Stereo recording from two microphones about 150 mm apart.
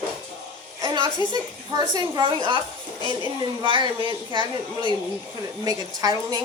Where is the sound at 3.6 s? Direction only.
35° right (ahead or behind).